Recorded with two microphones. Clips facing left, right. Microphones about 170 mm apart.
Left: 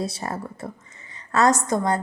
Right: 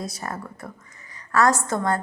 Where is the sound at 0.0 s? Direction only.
30° left (ahead or behind).